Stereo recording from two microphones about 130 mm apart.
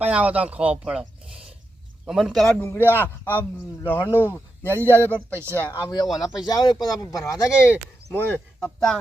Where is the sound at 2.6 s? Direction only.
15° left (ahead or behind).